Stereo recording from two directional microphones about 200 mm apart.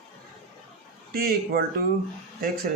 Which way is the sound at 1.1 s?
50° right (ahead or behind).